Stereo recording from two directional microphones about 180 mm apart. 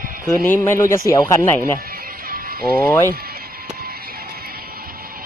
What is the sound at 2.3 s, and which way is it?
Music, 55° right (ahead or behind).